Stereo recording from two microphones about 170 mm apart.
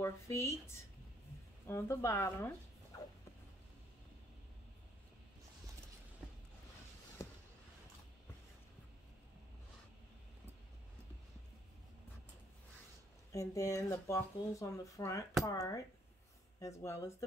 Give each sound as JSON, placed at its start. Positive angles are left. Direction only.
{"t": 0.0, "sound": "speech", "side_deg": 15}
{"t": 7.2, "sound": "a sound", "side_deg": 20}
{"t": 13.3, "sound": "speech", "side_deg": 20}